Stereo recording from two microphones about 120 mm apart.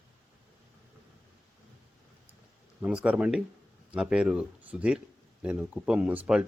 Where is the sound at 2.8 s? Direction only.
10° right (ahead or behind).